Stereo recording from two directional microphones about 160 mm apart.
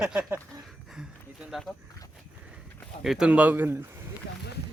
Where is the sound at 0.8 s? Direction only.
5° right (ahead or behind).